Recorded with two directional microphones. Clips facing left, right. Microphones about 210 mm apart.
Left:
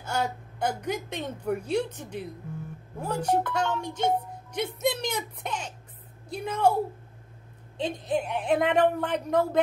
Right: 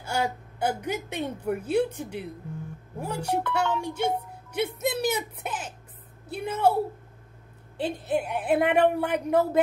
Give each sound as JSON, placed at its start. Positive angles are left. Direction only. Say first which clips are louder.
{"t": 0.0, "sound": "a woman's voice", "louder": "right 1 dB", "side_deg": -10}